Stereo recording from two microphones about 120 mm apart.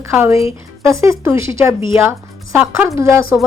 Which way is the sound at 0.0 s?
25° right (ahead or behind).